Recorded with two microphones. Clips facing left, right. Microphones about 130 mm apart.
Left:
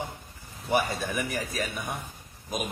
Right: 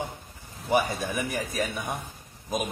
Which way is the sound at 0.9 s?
15° right (ahead or behind).